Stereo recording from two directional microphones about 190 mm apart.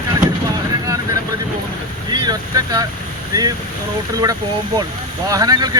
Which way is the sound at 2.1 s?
20° right (ahead or behind).